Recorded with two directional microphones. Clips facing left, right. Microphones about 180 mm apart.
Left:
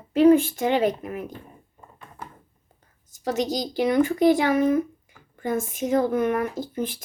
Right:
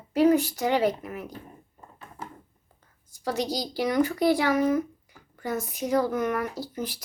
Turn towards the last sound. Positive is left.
turn(degrees=25)  # may be behind; listen again after turning